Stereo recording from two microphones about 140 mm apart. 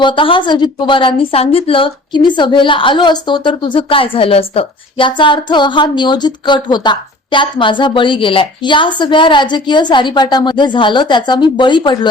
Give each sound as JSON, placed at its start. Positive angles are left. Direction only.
{"t": 0.0, "sound": "a woman's voice", "side_deg": 35}